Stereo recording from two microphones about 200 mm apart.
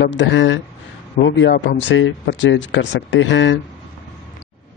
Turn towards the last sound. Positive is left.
turn(degrees=65)  # may be behind; listen again after turning